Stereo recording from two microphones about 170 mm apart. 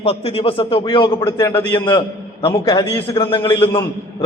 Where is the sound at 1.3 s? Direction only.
20° left (ahead or behind).